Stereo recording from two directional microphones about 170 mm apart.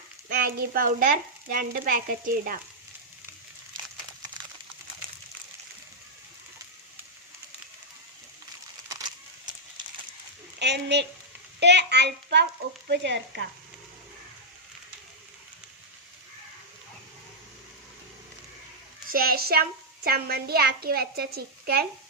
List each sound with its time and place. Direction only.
0.3 s frying: 60° right (ahead or behind)
8.9 s a sound: 20° right (ahead or behind)
10.6 s a woman's voice: 85° right
12.9 s frying: 85° right
19.1 s frying: 60° right (ahead or behind)